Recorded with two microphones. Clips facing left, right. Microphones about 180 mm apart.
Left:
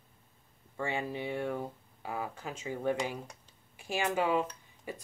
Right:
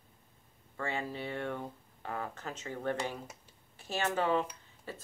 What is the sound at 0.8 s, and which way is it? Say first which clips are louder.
Speech: left 2 dB; 15° left (ahead or behind).